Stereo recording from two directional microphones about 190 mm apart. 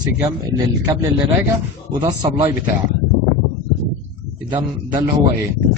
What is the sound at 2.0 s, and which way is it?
Speech, 20° right (ahead or behind).